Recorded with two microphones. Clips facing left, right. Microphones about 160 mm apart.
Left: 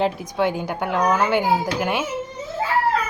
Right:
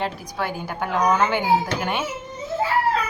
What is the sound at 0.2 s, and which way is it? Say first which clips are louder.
Speech: left 6 dB; 20° left (ahead or behind).